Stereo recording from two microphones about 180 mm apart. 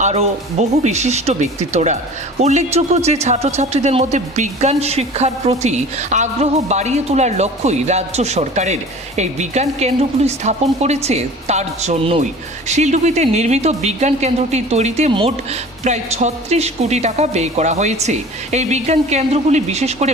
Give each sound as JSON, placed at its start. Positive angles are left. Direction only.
{"t": 0.0, "sound": "speech", "side_deg": -35}